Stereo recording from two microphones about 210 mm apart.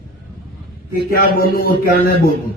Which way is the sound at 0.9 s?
45° left (ahead or behind).